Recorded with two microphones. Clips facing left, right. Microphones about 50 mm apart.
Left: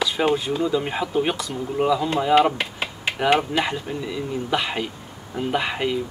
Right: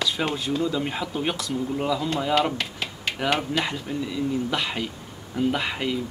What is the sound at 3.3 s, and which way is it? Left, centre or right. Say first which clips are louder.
Speech: left 5 dB; centre.